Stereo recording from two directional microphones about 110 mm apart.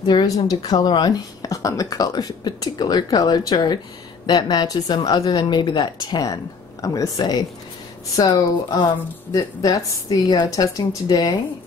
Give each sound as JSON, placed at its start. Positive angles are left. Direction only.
{"t": 0.0, "sound": "a woman's voice", "side_deg": 40}